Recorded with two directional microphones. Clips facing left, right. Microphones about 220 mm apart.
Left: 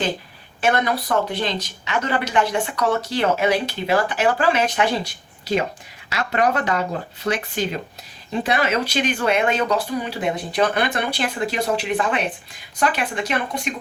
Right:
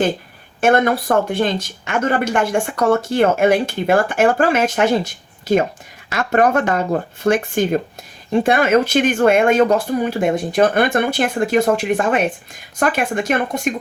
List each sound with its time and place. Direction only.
0.6 s speech: 50° right (ahead or behind)